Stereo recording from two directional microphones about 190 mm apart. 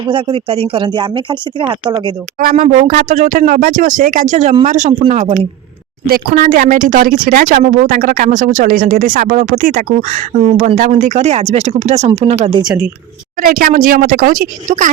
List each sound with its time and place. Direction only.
0.0 s speech: 25° right (ahead or behind)
2.4 s speech: 50° right (ahead or behind)
6.1 s speech: 50° right (ahead or behind); by 12.7 s 30° right (ahead or behind)
13.4 s speech: 50° right (ahead or behind)